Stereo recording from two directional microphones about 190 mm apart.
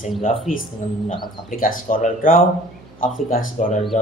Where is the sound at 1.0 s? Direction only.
25° left (ahead or behind).